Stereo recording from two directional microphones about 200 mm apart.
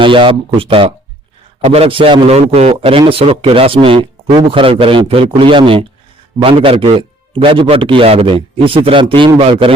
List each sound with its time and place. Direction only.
0.0 s a man's voice: 25° right (ahead or behind)